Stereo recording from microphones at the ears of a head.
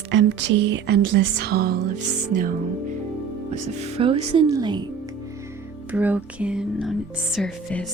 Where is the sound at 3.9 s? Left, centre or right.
Right.